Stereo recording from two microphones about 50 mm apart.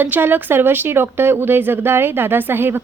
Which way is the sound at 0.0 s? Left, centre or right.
Right.